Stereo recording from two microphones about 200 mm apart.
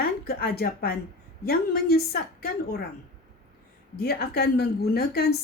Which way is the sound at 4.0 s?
50° left (ahead or behind).